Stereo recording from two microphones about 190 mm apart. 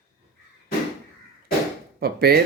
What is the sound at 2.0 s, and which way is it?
Speech, 55° right (ahead or behind).